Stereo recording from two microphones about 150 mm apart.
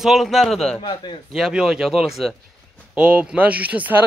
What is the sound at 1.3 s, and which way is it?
A man's voice, centre (ahead or behind).